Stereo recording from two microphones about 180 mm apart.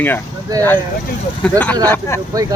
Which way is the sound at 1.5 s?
10° left (ahead or behind).